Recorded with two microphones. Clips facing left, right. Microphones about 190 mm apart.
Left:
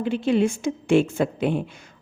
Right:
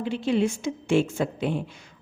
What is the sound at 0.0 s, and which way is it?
A woman's voice, 55° left (ahead or behind).